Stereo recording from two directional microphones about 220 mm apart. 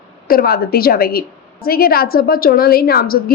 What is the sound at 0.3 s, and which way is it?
A woman's voice, 45° left (ahead or behind).